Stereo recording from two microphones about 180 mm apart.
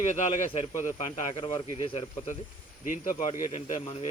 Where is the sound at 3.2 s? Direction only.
40° left (ahead or behind).